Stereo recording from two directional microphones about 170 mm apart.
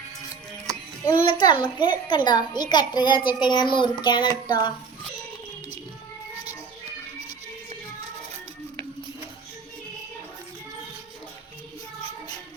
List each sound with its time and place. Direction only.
1.2 s a child's voice: 25° left (ahead or behind)